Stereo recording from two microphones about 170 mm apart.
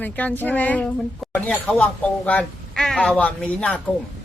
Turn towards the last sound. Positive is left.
turn(degrees=10)  # may be behind; listen again after turning